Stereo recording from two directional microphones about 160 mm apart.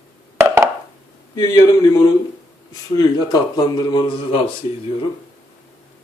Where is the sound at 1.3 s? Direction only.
20° left (ahead or behind).